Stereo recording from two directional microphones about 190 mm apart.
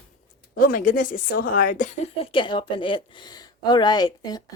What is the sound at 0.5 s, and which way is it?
Speech, 50° left (ahead or behind).